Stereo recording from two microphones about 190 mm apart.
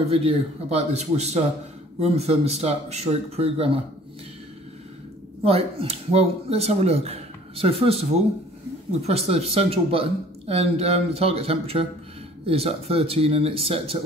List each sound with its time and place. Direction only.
0.1 s speech: 30° right (ahead or behind)
5.4 s speech: 30° right (ahead or behind)